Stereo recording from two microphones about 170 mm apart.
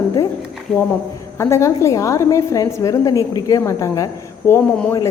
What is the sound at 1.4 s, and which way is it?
Speech, 15° left (ahead or behind).